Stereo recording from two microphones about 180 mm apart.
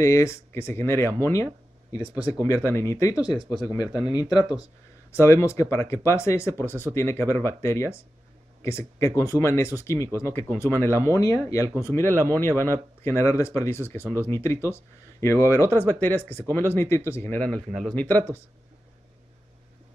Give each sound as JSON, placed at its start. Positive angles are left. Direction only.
{"t": 0.0, "sound": "speech", "side_deg": 15}